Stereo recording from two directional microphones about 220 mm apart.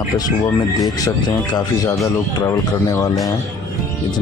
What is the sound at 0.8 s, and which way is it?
Speech, 15° left (ahead or behind).